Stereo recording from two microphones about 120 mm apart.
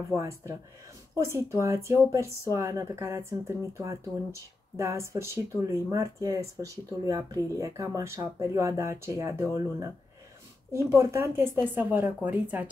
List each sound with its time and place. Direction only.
0.1 s speech: 25° right (ahead or behind)
10.9 s speech: 20° right (ahead or behind)